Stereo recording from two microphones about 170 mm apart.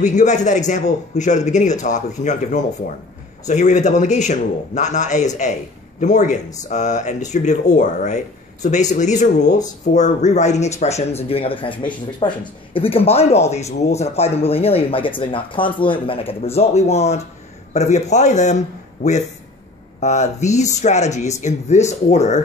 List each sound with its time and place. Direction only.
0.0 s a man's voice: 45° left (ahead or behind)
20.0 s a man's voice: 45° left (ahead or behind)